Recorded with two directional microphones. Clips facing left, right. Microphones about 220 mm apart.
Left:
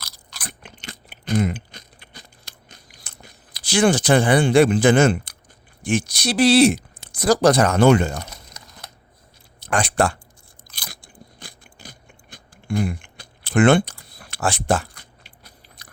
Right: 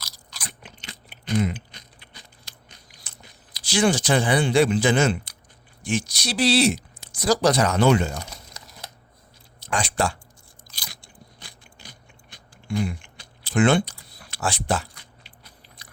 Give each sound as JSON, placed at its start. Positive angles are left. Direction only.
{"t": 0.0, "sound": "chewing", "side_deg": 60}
{"t": 5.8, "sound": "speech", "side_deg": 55}
{"t": 9.6, "sound": "speech", "side_deg": 55}
{"t": 10.7, "sound": "biting", "side_deg": 55}